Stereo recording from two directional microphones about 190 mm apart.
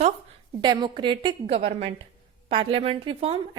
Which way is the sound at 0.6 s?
25° right (ahead or behind).